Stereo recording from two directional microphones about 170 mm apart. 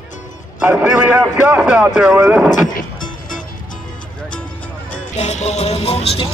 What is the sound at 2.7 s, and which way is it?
Music, 50° left (ahead or behind).